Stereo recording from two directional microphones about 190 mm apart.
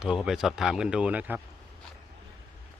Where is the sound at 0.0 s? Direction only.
5° right (ahead or behind).